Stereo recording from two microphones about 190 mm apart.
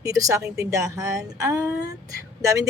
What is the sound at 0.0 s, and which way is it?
Speech, 15° right (ahead or behind).